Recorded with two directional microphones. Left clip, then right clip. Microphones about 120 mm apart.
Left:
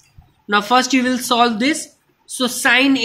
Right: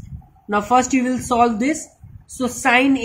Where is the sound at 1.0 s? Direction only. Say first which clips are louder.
Left 1 dB; 10° right (ahead or behind).